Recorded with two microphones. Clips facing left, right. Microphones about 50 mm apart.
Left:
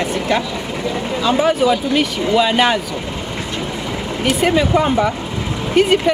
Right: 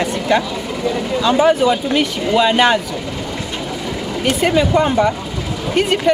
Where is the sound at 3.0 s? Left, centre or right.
Left.